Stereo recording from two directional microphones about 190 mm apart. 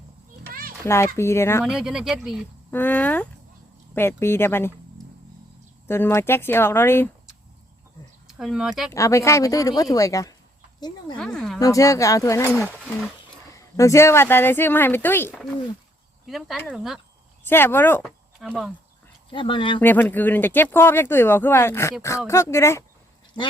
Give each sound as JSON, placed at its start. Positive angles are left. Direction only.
{"t": 0.9, "sound": "speech", "side_deg": 15}
{"t": 1.6, "sound": "speech", "side_deg": -5}
{"t": 2.6, "sound": "speech", "side_deg": 10}
{"t": 5.9, "sound": "speech", "side_deg": 15}
{"t": 8.3, "sound": "speech", "side_deg": 0}
{"t": 8.9, "sound": "speech", "side_deg": 15}
{"t": 11.2, "sound": "speech", "side_deg": 5}
{"t": 11.6, "sound": "speech", "side_deg": 15}
{"t": 15.3, "sound": "speech", "side_deg": 0}
{"t": 17.5, "sound": "speech", "side_deg": 10}
{"t": 18.3, "sound": "speech", "side_deg": 0}
{"t": 19.3, "sound": "speech", "side_deg": 25}
{"t": 19.8, "sound": "speech", "side_deg": 10}